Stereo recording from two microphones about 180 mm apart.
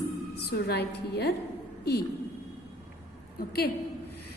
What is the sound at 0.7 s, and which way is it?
Speech, 65° left (ahead or behind).